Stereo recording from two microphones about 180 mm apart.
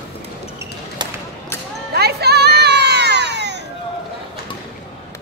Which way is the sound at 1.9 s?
65° right (ahead or behind).